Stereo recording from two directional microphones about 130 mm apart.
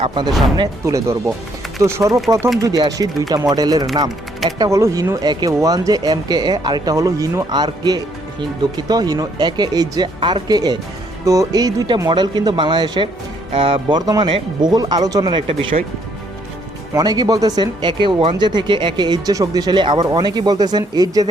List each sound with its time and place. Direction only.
0.1 s speech: 35° right (ahead or behind)
0.9 s speech: 25° right (ahead or behind); by 15.8 s 40° right (ahead or behind)
16.9 s speech: 30° right (ahead or behind)